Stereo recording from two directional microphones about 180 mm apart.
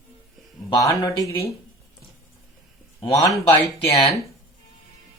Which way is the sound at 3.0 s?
20° left (ahead or behind).